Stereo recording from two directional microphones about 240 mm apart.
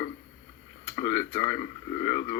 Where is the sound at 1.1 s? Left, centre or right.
Centre.